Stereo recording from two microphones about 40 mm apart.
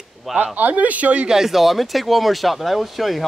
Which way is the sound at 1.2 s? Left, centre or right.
Centre.